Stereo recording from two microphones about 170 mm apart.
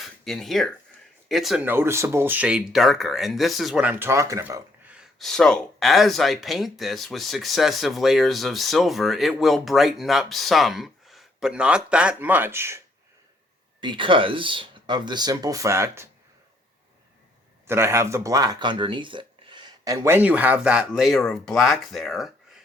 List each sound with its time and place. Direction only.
0.0 s speech: centre (ahead or behind)
1.6 s speech: 15° right (ahead or behind)
13.8 s speech: 30° right (ahead or behind)
17.7 s speech: 15° right (ahead or behind); by 22.6 s centre (ahead or behind)